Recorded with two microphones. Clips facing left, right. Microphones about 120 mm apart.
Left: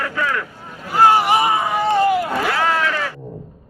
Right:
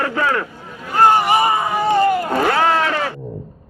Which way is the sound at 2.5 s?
35° right (ahead or behind).